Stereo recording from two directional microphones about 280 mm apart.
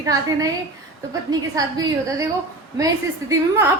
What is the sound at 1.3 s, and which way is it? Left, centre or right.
Speech, centre.